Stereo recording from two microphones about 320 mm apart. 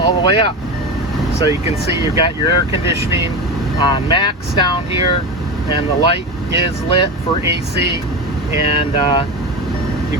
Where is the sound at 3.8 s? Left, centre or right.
Centre.